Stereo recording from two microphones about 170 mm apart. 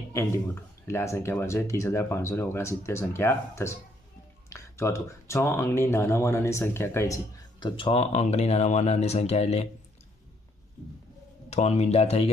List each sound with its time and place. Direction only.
0.8 s speech: 15° left (ahead or behind)
7.6 s speech: 30° left (ahead or behind)
11.5 s speech: 40° left (ahead or behind)